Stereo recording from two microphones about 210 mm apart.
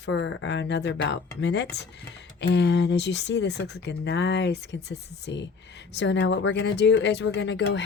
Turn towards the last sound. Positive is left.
turn(degrees=60)  # may be behind; listen again after turning